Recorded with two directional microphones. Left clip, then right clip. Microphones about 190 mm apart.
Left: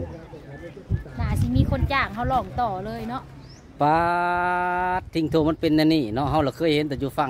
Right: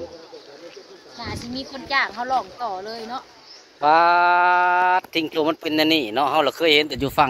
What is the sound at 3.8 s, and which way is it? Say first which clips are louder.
Speech: right 5 dB; 10° right (ahead or behind).